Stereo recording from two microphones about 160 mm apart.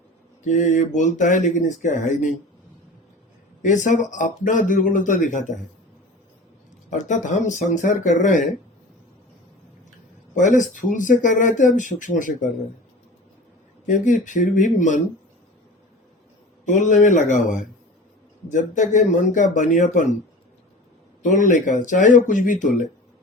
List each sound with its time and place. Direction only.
0.4 s speech: 50° left (ahead or behind)
3.6 s speech: 50° left (ahead or behind)
6.9 s speech: 50° left (ahead or behind)
10.3 s speech: 55° left (ahead or behind)
13.8 s speech: 50° left (ahead or behind)
16.6 s speech: 50° left (ahead or behind)
21.2 s speech: 50° left (ahead or behind)